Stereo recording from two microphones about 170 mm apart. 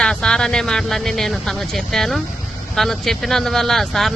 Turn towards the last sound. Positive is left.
turn(degrees=0)  # may be behind; listen again after turning